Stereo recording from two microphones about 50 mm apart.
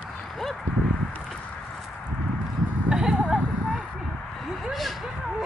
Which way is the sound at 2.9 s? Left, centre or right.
Centre.